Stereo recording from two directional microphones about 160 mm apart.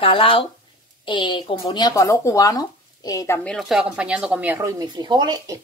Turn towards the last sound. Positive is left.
turn(degrees=-25)  # may be behind; listen again after turning